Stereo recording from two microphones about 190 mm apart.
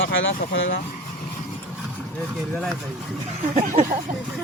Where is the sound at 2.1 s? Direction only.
Centre (ahead or behind).